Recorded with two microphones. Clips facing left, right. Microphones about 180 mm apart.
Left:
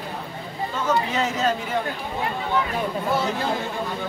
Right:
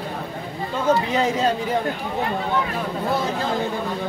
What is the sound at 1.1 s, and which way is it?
Speech, 35° right (ahead or behind).